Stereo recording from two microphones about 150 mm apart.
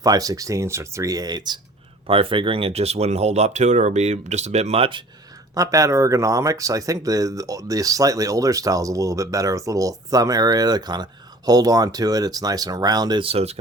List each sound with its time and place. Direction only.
0.0 s speech: 25° right (ahead or behind)
2.0 s speech: 40° right (ahead or behind)
5.5 s speech: 20° right (ahead or behind); by 13.6 s 45° right (ahead or behind)